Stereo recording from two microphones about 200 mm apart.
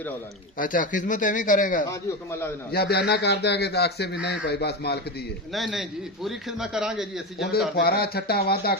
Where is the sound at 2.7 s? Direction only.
55° left (ahead or behind).